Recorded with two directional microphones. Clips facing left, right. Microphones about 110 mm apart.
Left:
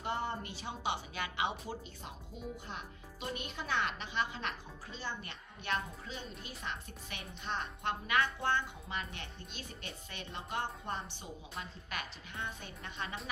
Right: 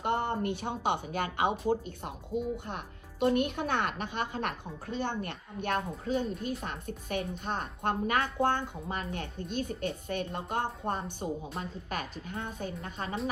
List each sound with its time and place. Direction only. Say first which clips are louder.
0.0 s a woman's voice: right 7 dB; 60° right (ahead or behind); by 13.1 s 40° right (ahead or behind)